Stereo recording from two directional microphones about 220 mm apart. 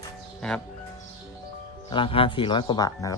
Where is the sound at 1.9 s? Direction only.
25° left (ahead or behind).